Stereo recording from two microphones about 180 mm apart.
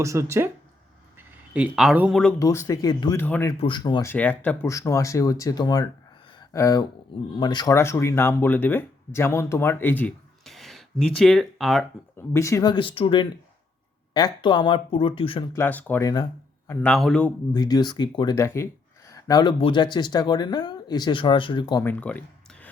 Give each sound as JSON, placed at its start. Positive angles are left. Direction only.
{"t": 0.0, "sound": "speech", "side_deg": -15}
{"t": 1.5, "sound": "speech", "side_deg": -5}
{"t": 2.4, "sound": "speech", "side_deg": 15}
{"t": 3.6, "sound": "speech", "side_deg": 25}
{"t": 4.1, "sound": "speech", "side_deg": 10}
{"t": 12.1, "sound": "speech", "side_deg": 15}
{"t": 15.5, "sound": "speech", "side_deg": 10}
{"t": 16.6, "sound": "speech", "side_deg": 5}
{"t": 17.5, "sound": "speech", "side_deg": 25}
{"t": 21.8, "sound": "speech", "side_deg": 10}